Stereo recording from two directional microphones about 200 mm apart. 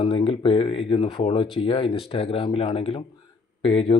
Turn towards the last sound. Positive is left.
turn(degrees=30)  # may be behind; listen again after turning